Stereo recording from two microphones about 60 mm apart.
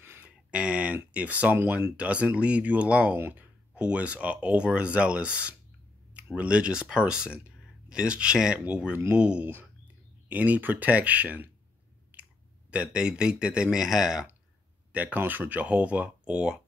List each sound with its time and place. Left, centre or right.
0.2 s a sound: centre
1.1 s speech: right
3.2 s speech: right
3.7 s speech: right
12.1 s chewing: right
12.7 s speech: centre
14.9 s speech: right